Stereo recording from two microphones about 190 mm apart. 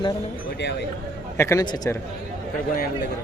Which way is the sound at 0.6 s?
60° left (ahead or behind).